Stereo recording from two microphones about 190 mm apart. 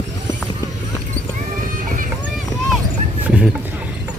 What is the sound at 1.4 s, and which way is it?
Clip-clop, 45° right (ahead or behind).